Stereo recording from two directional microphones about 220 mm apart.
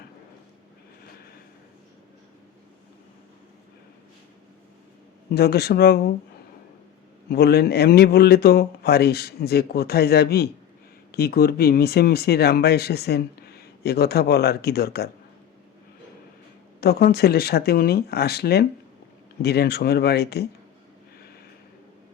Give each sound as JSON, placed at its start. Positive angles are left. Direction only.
{"t": 5.3, "sound": "speech", "side_deg": 45}
{"t": 7.3, "sound": "speech", "side_deg": 45}
{"t": 16.8, "sound": "speech", "side_deg": 45}